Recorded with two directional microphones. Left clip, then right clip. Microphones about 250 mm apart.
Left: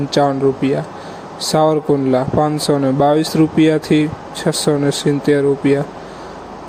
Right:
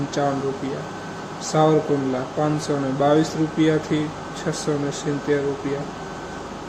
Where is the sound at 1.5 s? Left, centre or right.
Left.